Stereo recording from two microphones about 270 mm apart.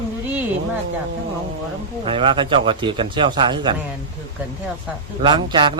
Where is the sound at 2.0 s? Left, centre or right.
Centre.